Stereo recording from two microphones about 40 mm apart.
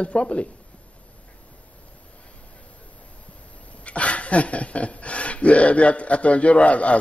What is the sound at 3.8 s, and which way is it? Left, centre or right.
Speech, left.